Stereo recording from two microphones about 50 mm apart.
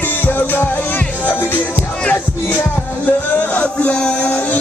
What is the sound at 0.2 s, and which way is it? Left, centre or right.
Music, left.